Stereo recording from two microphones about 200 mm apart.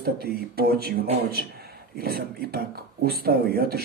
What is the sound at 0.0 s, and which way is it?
Speech, 50° right (ahead or behind).